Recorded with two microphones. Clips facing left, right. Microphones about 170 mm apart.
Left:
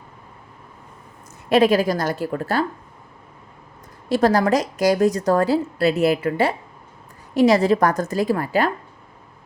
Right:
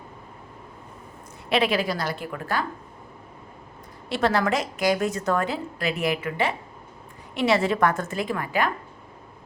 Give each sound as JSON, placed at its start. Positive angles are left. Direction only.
{"t": 1.5, "sound": "a woman's voice", "side_deg": 45}
{"t": 4.1, "sound": "a woman's voice", "side_deg": 40}